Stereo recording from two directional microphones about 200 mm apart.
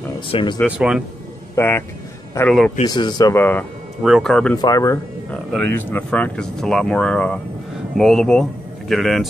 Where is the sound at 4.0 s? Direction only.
Centre (ahead or behind).